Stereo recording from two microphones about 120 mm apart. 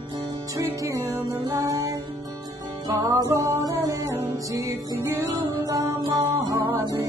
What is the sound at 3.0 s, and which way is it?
Music, 30° right (ahead or behind).